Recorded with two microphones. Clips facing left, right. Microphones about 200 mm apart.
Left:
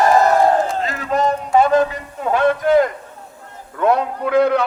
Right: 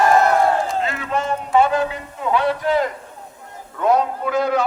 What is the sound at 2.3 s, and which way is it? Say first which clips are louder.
A man's voice: left 4 dB; 50° left (ahead or behind).